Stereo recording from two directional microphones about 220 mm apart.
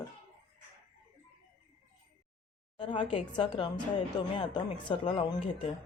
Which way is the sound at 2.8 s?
20° left (ahead or behind).